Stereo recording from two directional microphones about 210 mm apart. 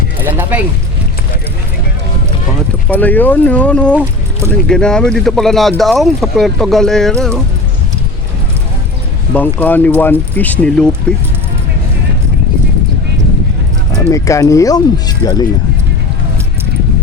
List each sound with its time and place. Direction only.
0.5 s speech: 5° right (ahead or behind)
2.9 s speech: 10° left (ahead or behind)
3.9 s speech: 10° right (ahead or behind)
4.7 s speech: 5° left (ahead or behind)
9.3 s speech: 10° left (ahead or behind)
14.1 s speech: 15° left (ahead or behind)